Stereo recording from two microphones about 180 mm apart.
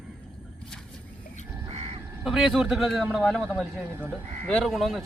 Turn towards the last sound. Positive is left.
turn(degrees=0)  # may be behind; listen again after turning